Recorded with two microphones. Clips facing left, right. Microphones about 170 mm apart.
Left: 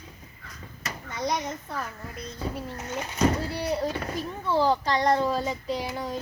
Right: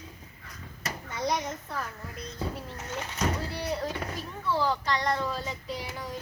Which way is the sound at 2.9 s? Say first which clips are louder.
Left 6 dB; 15° left (ahead or behind).